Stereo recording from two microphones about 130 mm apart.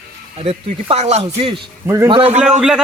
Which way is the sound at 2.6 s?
5° right (ahead or behind).